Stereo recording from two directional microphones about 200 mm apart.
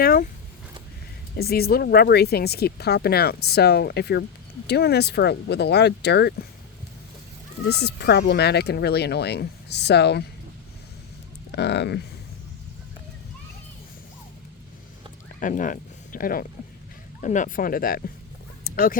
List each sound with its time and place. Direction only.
0.0 s speech: 45° left (ahead or behind)
1.4 s speech: 50° left (ahead or behind)
7.7 s speech: 55° left (ahead or behind)
11.5 s speech: 60° left (ahead or behind)
15.4 s speech: 40° left (ahead or behind)
18.6 s dog: 45° left (ahead or behind)